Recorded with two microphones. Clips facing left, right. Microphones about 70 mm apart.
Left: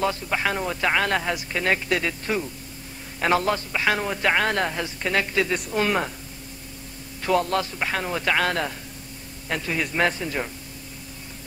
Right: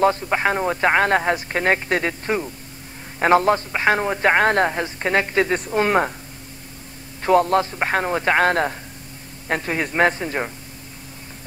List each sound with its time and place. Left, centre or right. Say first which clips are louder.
0.0 s a woman's voice: right 6 dB; right
7.2 s a woman's voice: right 6 dB; right